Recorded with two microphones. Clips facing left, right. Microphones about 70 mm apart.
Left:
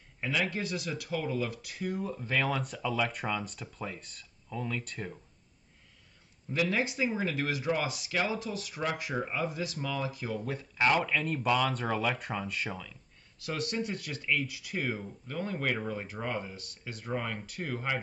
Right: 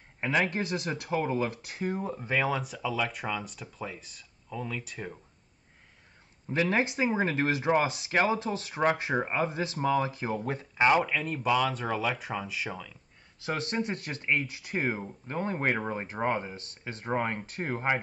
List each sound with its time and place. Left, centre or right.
0.2 s speech: right
2.2 s speech: centre
6.5 s speech: right
9.1 s speech: right
11.1 s speech: centre
13.4 s speech: right